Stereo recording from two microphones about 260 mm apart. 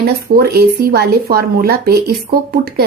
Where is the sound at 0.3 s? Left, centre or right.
Right.